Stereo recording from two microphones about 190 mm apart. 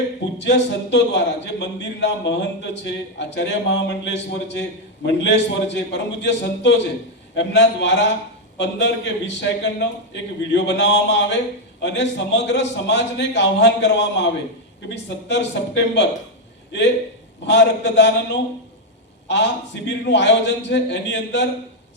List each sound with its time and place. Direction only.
0.4 s a man's voice: 65° left (ahead or behind)
17.4 s a man's voice: 65° left (ahead or behind)